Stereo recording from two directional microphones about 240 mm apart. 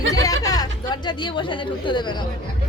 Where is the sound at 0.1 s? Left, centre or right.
Centre.